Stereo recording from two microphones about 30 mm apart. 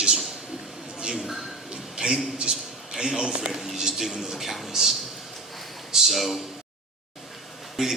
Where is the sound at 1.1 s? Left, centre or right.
Centre.